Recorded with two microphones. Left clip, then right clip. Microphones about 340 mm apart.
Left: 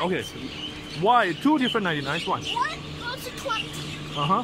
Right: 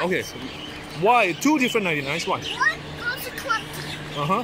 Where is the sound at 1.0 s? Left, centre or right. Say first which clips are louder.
Right 2 dB; centre.